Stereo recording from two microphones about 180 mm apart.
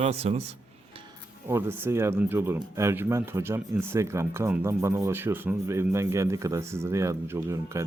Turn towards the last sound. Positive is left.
turn(degrees=-15)  # may be behind; listen again after turning